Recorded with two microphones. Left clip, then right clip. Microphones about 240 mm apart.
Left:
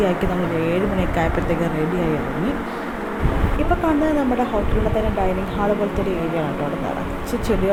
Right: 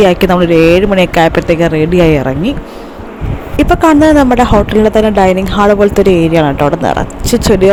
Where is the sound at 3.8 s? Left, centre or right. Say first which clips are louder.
Right 15 dB; right.